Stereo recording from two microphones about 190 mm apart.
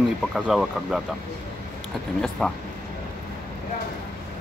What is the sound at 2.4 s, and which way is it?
Speech, centre (ahead or behind).